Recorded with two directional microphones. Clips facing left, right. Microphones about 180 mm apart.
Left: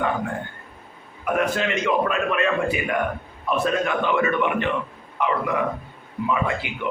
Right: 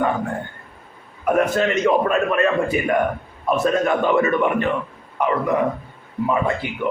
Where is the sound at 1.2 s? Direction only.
40° right (ahead or behind).